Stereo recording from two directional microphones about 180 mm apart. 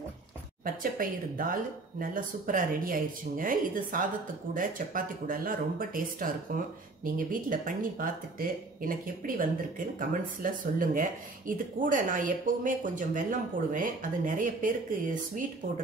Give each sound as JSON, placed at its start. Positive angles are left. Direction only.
{"t": 0.7, "sound": "speech", "side_deg": -50}